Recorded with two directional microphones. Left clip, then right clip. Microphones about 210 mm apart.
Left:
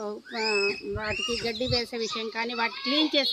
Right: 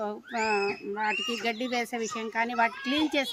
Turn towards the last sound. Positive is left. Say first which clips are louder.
# left 3 dB
turn(degrees=-20)  # may be behind; listen again after turning